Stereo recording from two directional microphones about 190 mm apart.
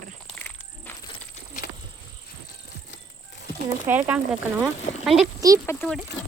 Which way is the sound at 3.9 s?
5° right (ahead or behind).